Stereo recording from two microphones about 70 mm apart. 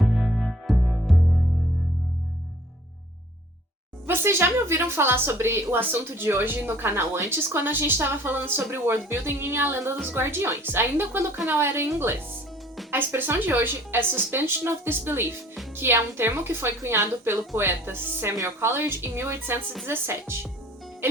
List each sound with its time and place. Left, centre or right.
0.0 s music: centre
4.0 s a woman's voice: right